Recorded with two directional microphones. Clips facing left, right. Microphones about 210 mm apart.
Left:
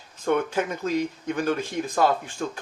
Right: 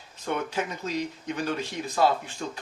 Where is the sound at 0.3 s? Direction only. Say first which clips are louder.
Left 6 dB; 50° left (ahead or behind).